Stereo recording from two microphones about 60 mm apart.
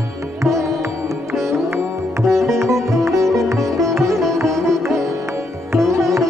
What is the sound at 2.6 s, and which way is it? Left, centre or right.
Sitar, right.